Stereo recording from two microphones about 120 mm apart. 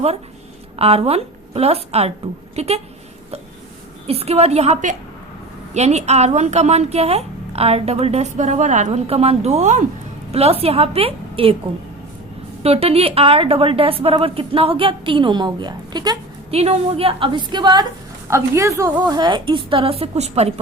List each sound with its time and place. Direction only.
0.8 s a woman's voice: 55° right (ahead or behind)
4.0 s a woman's voice: 55° right (ahead or behind); by 4.9 s 80° right
5.7 s a woman's voice: 65° right (ahead or behind); by 8.9 s 90° right
8.9 s a woman's voice: 55° right (ahead or behind); by 9.8 s 75° right (ahead or behind)
10.3 s a woman's voice: 55° right (ahead or behind)
12.6 s a woman's voice: 60° right (ahead or behind); by 16.1 s 35° right (ahead or behind)
16.5 s a woman's voice: 55° right (ahead or behind); by 17.8 s 40° right (ahead or behind)
18.3 s a woman's voice: 25° right (ahead or behind)
19.0 s a woman's voice: 35° right (ahead or behind); by 20.5 s 65° right (ahead or behind)